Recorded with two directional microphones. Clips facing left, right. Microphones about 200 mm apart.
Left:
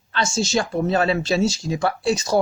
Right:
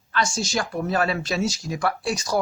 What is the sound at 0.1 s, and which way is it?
Speech, 25° left (ahead or behind).